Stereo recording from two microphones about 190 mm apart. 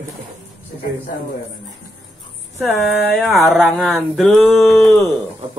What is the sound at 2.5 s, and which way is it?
Speech, centre (ahead or behind).